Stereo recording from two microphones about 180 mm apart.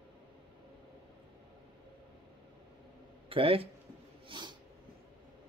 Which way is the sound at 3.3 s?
30° right (ahead or behind).